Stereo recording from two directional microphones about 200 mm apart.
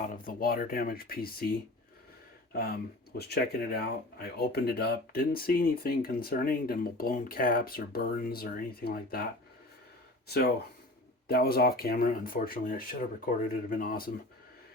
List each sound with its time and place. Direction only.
0.0 s speech: 45° left (ahead or behind)
10.2 s speech: 50° left (ahead or behind)